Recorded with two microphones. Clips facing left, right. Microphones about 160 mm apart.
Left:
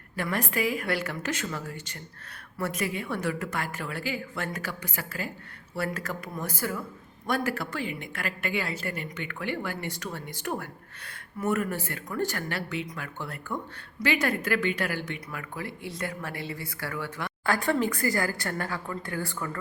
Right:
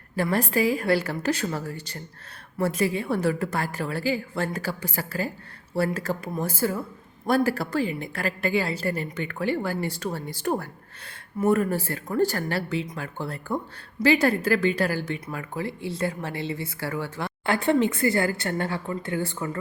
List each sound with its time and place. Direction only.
0.2 s a woman's voice: 35° right (ahead or behind)